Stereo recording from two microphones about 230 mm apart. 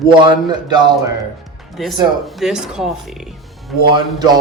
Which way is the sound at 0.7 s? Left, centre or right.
Centre.